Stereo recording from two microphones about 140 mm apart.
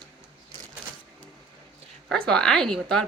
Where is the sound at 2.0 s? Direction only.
5° left (ahead or behind).